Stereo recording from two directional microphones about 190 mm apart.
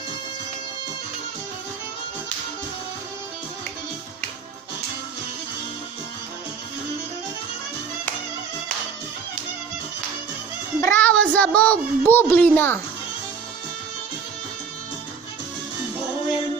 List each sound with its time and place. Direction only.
10.8 s a child's voice: 15° left (ahead or behind)